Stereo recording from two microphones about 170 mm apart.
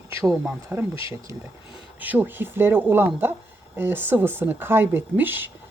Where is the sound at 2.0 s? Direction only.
10° right (ahead or behind).